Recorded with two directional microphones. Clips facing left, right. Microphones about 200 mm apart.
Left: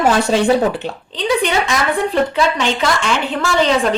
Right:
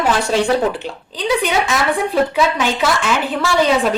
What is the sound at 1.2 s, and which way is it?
A woman's voice, 5° right (ahead or behind).